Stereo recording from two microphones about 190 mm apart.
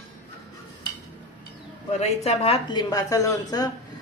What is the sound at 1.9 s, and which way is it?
A woman's voice, 35° left (ahead or behind).